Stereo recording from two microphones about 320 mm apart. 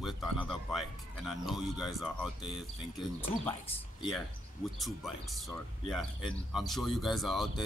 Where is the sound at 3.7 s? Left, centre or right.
Centre.